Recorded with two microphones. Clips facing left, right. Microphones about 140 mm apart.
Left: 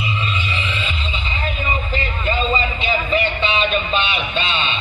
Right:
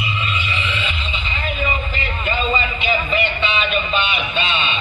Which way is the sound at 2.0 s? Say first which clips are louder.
Left 1 dB; 35° left (ahead or behind).